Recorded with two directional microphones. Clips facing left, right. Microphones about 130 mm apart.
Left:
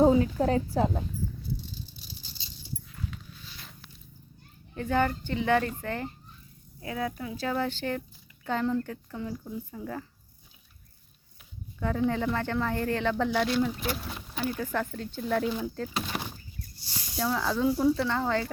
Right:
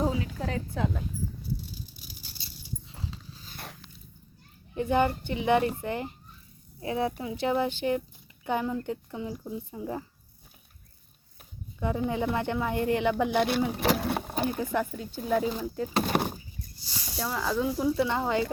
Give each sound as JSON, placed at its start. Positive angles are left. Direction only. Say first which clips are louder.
{"t": 0.0, "sound": "a woman's voice", "louder": "left 8 dB", "side_deg": 40}
{"t": 1.7, "sound": "rattle", "louder": "left 1 dB", "side_deg": -10}
{"t": 2.9, "sound": "dog", "louder": "left 1 dB", "side_deg": -30}
{"t": 4.7, "sound": "speech", "louder": "right 2 dB", "side_deg": -15}
{"t": 11.8, "sound": "speech", "louder": "left 1 dB", "side_deg": -15}
{"t": 13.3, "sound": "speech", "louder": "right 2 dB", "side_deg": -55}
{"t": 13.7, "sound": "speech", "louder": "right 6 dB", "side_deg": -70}
{"t": 14.3, "sound": "speech", "louder": "left 2 dB", "side_deg": -50}
{"t": 14.6, "sound": "speech", "louder": "right 2 dB", "side_deg": -15}
{"t": 15.9, "sound": "a sound", "louder": "right 7 dB", "side_deg": -50}
{"t": 17.2, "sound": "speech", "louder": "left 1 dB", "side_deg": -5}
{"t": 18.1, "sound": "speech", "louder": "right 1 dB", "side_deg": -15}